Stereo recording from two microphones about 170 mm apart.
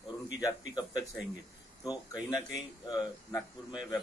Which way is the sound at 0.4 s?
25° left (ahead or behind).